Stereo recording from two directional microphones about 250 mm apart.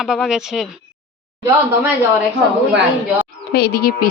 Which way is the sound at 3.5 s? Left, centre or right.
Left.